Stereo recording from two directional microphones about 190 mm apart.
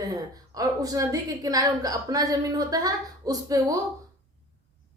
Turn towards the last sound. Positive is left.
turn(degrees=-20)  # may be behind; listen again after turning